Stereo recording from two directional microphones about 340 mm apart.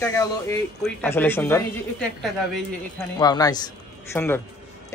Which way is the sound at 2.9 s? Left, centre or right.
Centre.